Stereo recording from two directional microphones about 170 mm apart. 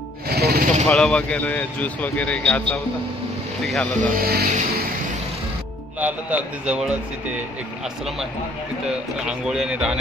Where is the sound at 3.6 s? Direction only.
Centre (ahead or behind).